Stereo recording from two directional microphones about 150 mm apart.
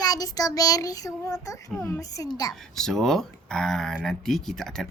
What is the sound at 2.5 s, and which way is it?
Speech, centre (ahead or behind).